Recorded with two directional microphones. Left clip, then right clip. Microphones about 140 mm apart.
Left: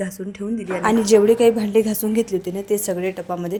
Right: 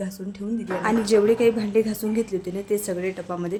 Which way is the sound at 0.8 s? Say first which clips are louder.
Left 5 dB; 20° left (ahead or behind).